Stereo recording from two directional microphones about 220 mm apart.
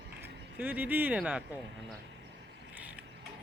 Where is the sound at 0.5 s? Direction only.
10° right (ahead or behind).